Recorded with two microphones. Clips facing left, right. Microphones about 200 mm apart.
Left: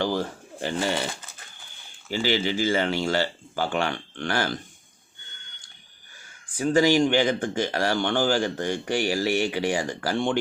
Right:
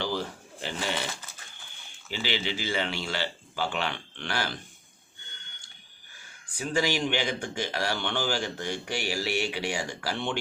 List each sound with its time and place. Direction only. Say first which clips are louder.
0.0 s pigeon: left 5 dB; 50° left (ahead or behind)
2.0 s speech: left 7 dB; 45° left (ahead or behind)
6.6 s speech: left 8 dB; 50° left (ahead or behind)